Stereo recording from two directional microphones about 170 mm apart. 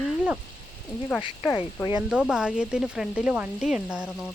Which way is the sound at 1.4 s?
15° left (ahead or behind).